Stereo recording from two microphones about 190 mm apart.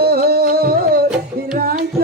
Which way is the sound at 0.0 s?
55° right (ahead or behind).